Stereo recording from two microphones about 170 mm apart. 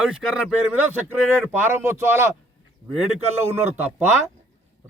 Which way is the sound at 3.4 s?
10° right (ahead or behind).